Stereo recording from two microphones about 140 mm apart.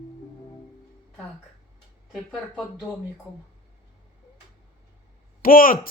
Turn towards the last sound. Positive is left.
turn(degrees=90)